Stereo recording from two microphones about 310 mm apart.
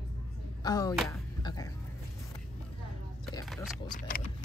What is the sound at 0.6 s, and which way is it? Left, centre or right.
Music, centre.